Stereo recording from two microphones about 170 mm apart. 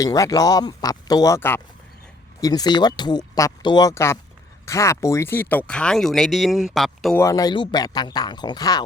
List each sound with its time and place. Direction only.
0.0 s speech: 20° left (ahead or behind)
2.4 s speech: 25° left (ahead or behind); by 7.2 s centre (ahead or behind)
7.2 s speech: 20° left (ahead or behind)